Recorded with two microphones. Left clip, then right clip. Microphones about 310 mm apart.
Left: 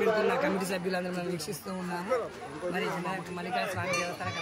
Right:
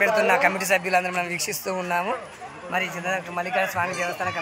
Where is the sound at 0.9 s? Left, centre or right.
Right.